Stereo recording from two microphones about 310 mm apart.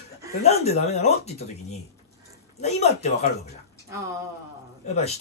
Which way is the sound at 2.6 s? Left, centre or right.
Left.